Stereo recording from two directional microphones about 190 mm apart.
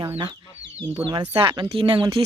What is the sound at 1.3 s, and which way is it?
Speech, 25° right (ahead or behind).